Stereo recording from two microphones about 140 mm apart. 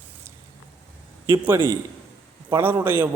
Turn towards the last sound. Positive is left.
turn(degrees=-15)  # may be behind; listen again after turning